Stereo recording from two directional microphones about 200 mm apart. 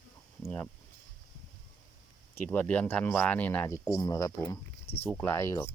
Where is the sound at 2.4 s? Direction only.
10° left (ahead or behind).